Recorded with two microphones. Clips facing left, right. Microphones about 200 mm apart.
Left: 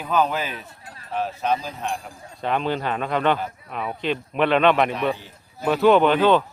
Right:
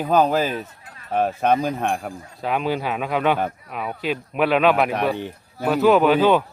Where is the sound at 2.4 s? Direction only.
10° right (ahead or behind).